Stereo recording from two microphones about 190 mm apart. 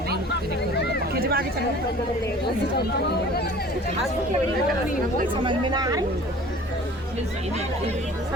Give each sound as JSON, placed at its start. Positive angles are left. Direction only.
{"t": 1.2, "sound": "chatter", "side_deg": -55}
{"t": 5.3, "sound": "speech", "side_deg": -25}